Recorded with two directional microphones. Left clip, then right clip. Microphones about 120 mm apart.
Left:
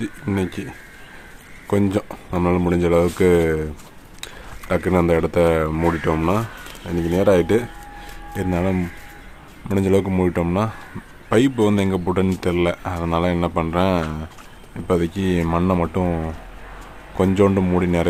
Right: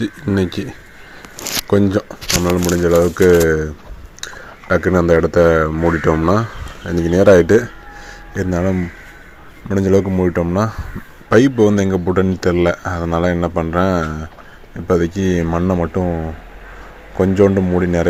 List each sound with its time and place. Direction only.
0.3 s speech: 35° right (ahead or behind)
1.9 s speech: 10° right (ahead or behind)
4.2 s a sound: 10° right (ahead or behind)
4.7 s speech: 15° right (ahead or behind)